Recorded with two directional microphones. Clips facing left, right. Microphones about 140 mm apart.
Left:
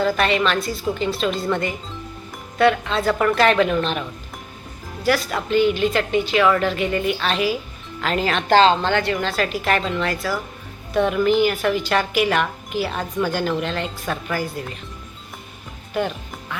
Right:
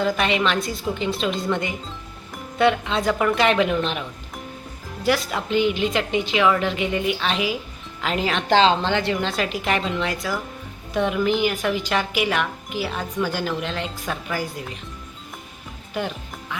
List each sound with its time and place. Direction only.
0.0 s a woman's voice: 15° right (ahead or behind)
5.0 s a woman's voice: 25° right (ahead or behind)
10.2 s speech: centre (ahead or behind)
10.9 s a woman's voice: 10° right (ahead or behind)
16.0 s music: 10° right (ahead or behind)